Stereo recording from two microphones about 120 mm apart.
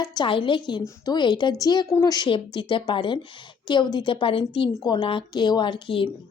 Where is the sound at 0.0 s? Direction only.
35° left (ahead or behind).